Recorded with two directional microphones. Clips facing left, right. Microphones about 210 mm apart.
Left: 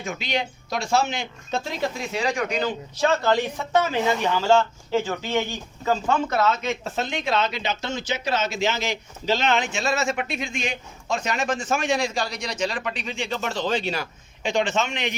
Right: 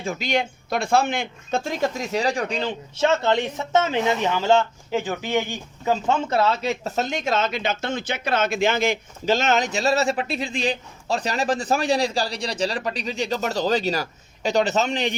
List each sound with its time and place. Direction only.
0.0 s speech: 35° right (ahead or behind)
0.3 s speech: 55° right (ahead or behind); by 15.1 s 35° right (ahead or behind)